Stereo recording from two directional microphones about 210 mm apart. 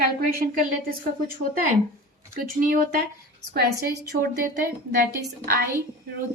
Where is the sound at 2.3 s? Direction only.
40° right (ahead or behind).